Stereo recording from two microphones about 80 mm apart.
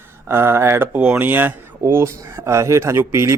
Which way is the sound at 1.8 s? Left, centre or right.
Right.